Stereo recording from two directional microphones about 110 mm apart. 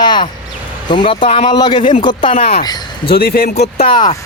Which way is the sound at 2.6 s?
40° left (ahead or behind).